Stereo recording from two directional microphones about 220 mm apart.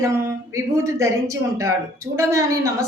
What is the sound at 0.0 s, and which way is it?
A woman's voice, 15° right (ahead or behind).